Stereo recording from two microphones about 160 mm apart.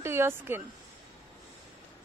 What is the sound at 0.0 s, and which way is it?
Speech, 15° right (ahead or behind).